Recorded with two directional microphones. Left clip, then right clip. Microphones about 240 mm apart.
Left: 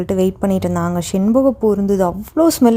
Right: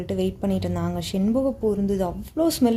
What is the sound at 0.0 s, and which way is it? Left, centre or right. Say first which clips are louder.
A woman's voice: left 9 dB; left.